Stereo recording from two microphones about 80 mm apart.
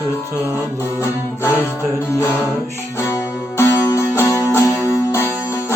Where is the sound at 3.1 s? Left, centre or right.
Left.